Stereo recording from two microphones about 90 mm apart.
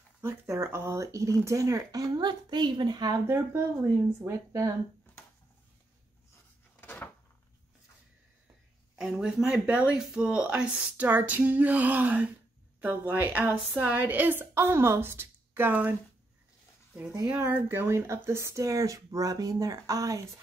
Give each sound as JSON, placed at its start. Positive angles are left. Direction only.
{"t": 0.2, "sound": "speech", "side_deg": -30}
{"t": 3.3, "sound": "speech", "side_deg": -30}
{"t": 6.8, "sound": "cupboard open or close", "side_deg": 25}
{"t": 8.9, "sound": "a woman's voice", "side_deg": -5}
{"t": 17.3, "sound": "speech", "side_deg": -15}